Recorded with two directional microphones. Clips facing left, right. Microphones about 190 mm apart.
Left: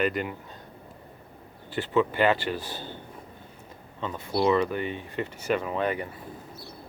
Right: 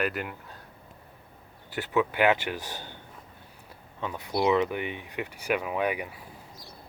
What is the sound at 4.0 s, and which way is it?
Speech, 15° right (ahead or behind).